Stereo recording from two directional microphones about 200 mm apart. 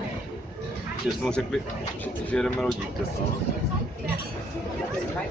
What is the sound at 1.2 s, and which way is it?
Speech, 5° left (ahead or behind).